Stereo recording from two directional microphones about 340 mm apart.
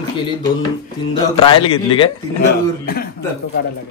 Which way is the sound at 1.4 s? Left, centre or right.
Centre.